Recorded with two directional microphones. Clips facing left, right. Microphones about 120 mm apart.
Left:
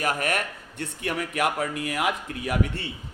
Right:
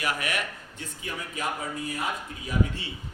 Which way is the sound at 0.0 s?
45° left (ahead or behind).